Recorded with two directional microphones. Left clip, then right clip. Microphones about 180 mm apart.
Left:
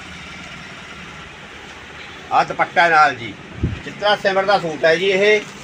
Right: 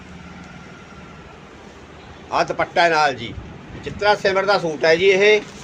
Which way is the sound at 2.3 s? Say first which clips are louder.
Left 3 dB; 45° right (ahead or behind).